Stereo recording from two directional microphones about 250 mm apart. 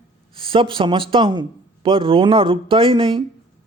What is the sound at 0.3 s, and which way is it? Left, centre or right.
A man's voice, right.